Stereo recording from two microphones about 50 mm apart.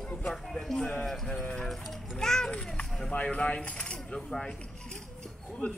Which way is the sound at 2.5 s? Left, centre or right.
Left.